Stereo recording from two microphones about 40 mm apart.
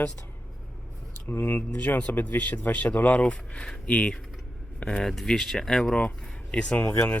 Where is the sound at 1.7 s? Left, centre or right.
Left.